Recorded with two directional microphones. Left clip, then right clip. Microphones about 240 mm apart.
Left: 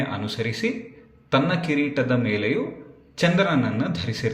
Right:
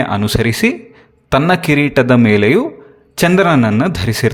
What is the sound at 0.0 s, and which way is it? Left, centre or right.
A man's voice, right.